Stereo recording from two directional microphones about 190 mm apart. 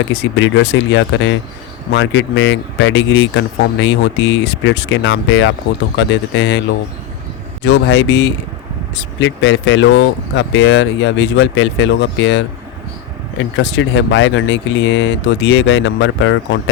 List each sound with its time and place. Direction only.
0.1 s speech: 70° left (ahead or behind)
7.6 s speech: 70° left (ahead or behind)